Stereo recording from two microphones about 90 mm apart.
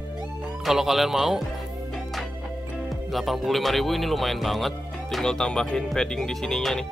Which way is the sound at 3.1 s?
Centre (ahead or behind).